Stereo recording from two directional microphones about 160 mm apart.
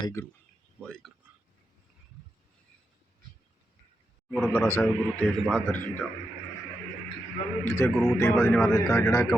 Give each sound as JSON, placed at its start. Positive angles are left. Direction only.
{"t": 0.0, "sound": "a man's voice", "side_deg": 15}
{"t": 0.8, "sound": "speech", "side_deg": 5}
{"t": 4.3, "sound": "a man's voice", "side_deg": 0}
{"t": 4.5, "sound": "a man's voice", "side_deg": 10}
{"t": 7.6, "sound": "a man's voice", "side_deg": 15}
{"t": 7.9, "sound": "a man's voice", "side_deg": 0}